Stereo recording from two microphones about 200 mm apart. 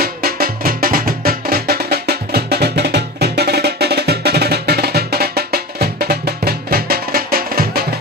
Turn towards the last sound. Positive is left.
turn(degrees=-45)  # may be behind; listen again after turning